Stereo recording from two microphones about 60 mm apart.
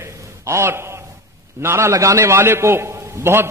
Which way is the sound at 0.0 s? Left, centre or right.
Right.